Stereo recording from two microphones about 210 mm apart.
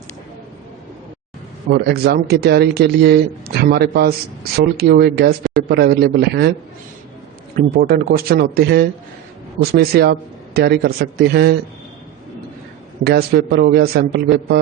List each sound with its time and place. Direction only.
1.7 s speech: 50° right (ahead or behind)
7.5 s speech: 45° right (ahead or behind)
13.1 s speech: 45° right (ahead or behind)